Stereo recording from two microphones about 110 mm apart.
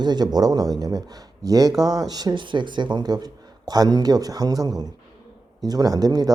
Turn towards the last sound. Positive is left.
turn(degrees=-35)  # may be behind; listen again after turning